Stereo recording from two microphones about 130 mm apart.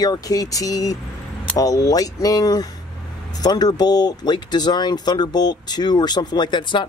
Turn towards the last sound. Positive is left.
turn(degrees=35)  # may be behind; listen again after turning